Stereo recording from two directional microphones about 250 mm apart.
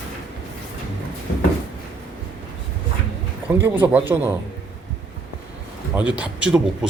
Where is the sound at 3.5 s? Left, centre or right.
Centre.